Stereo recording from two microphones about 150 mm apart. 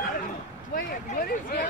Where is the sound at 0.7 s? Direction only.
80° left.